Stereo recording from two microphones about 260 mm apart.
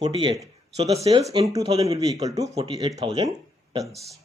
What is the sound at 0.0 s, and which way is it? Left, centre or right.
Speech, centre.